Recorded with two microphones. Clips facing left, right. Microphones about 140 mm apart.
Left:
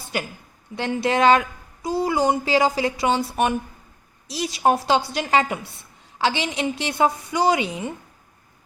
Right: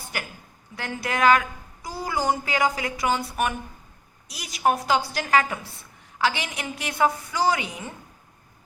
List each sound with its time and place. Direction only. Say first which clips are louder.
0.1 s a woman's voice: left 7 dB; 25° left (ahead or behind)